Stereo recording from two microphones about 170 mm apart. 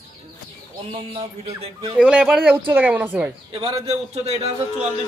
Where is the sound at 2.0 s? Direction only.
5° right (ahead or behind).